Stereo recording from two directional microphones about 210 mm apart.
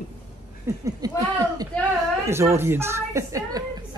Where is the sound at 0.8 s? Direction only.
15° right (ahead or behind).